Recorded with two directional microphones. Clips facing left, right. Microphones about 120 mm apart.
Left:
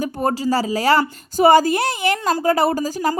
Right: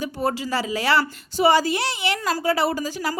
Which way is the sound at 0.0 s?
45° left (ahead or behind).